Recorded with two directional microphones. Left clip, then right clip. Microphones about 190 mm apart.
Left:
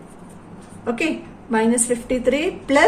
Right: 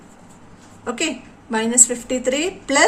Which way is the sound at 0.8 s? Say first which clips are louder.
Left 1 dB; 35° right (ahead or behind).